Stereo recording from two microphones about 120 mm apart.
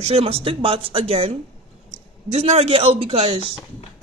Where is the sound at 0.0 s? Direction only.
55° right (ahead or behind).